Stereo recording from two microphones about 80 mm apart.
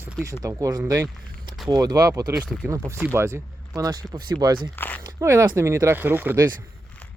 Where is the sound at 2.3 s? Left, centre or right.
Centre.